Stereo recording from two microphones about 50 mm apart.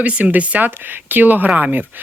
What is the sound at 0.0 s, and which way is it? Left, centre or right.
Speech, right.